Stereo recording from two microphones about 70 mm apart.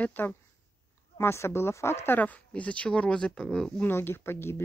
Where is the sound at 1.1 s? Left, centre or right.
Left.